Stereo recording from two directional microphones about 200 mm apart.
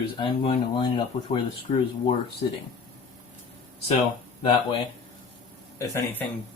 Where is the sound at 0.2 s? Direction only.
25° left (ahead or behind).